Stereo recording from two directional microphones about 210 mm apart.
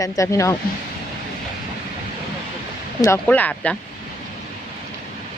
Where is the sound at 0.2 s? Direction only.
15° left (ahead or behind).